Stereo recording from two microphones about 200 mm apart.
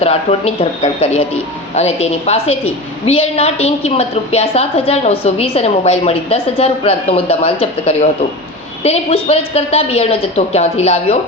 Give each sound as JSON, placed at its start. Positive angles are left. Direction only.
{"t": 0.0, "sound": "a woman's voice", "side_deg": 30}